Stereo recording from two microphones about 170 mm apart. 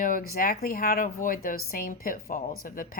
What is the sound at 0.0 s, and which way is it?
Speech, 55° left (ahead or behind).